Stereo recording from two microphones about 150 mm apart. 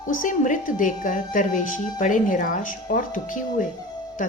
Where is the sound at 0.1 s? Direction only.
60° left (ahead or behind).